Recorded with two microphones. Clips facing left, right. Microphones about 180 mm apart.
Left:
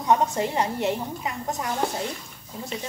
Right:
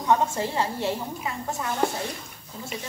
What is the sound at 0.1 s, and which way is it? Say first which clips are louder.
A woman's voice: left 1 dB; 15° left (ahead or behind).